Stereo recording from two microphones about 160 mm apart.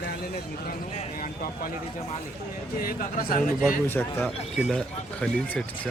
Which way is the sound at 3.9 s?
10° left (ahead or behind).